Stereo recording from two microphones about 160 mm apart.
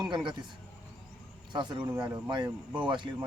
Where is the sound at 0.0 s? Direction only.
30° right (ahead or behind).